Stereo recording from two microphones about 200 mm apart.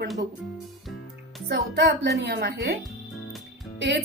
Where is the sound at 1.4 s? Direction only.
55° right (ahead or behind).